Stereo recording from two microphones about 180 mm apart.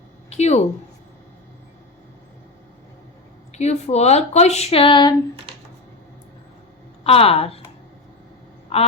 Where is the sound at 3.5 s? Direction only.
40° left (ahead or behind).